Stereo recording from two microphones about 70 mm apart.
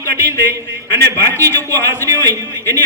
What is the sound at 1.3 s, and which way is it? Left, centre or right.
Speech, left.